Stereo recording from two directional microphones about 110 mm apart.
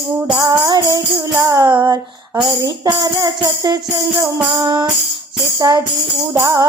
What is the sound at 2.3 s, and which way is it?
Music, 35° right (ahead or behind).